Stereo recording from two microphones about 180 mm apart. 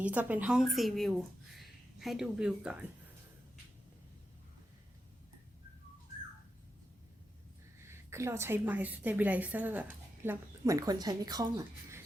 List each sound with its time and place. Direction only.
0.0 s a woman's voice: 10° right (ahead or behind)
7.9 s a woman's voice: 15° right (ahead or behind)